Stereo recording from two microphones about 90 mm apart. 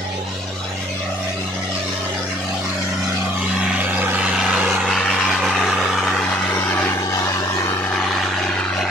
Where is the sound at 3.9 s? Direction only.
15° right (ahead or behind).